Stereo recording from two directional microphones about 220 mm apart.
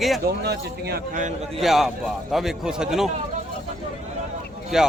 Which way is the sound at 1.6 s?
Centre (ahead or behind).